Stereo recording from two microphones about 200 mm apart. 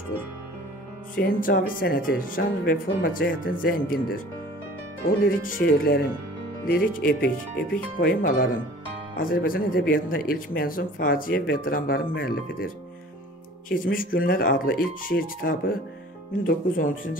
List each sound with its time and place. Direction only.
1.1 s speech: 45° left (ahead or behind)
5.2 s speech: 45° left (ahead or behind)